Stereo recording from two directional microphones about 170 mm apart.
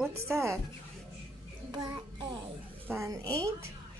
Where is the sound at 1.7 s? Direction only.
25° right (ahead or behind).